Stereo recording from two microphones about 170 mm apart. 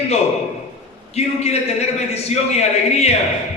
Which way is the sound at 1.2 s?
40° left (ahead or behind).